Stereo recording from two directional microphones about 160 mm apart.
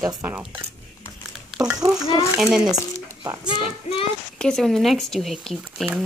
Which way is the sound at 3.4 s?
35° left (ahead or behind).